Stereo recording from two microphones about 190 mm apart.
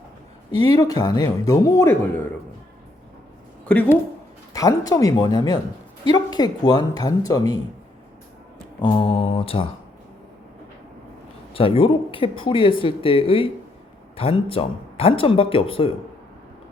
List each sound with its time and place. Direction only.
0.8 s speech: 20° left (ahead or behind)
3.7 s speech: 10° left (ahead or behind)
4.5 s speech: 20° left (ahead or behind)
8.8 s speech: 30° left (ahead or behind)
11.5 s speech: 30° left (ahead or behind)